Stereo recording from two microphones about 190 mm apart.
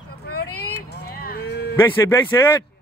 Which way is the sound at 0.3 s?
55° left (ahead or behind).